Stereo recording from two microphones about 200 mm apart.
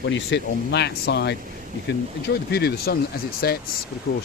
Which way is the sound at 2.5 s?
55° left (ahead or behind).